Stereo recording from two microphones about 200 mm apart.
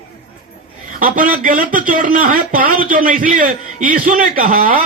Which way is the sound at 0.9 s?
40° right (ahead or behind).